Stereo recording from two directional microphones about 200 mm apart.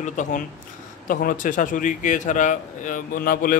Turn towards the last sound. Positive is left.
turn(degrees=45)  # may be behind; listen again after turning